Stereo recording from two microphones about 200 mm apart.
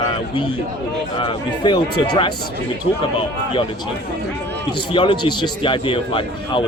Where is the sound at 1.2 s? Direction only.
25° left (ahead or behind).